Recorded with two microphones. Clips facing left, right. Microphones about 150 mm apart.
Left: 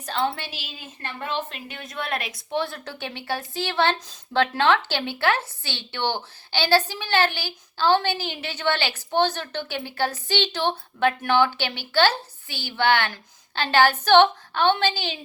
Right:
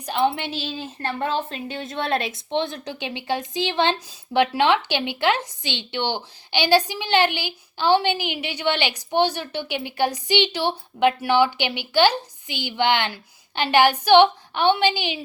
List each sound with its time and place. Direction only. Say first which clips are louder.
0.0 s a woman's voice: right 4 dB; 15° right (ahead or behind)